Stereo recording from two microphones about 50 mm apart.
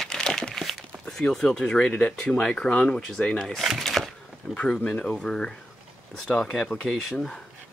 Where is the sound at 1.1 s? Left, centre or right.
Centre.